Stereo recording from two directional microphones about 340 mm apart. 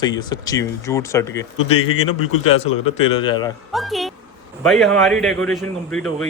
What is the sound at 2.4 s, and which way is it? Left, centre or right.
A man's voice, centre.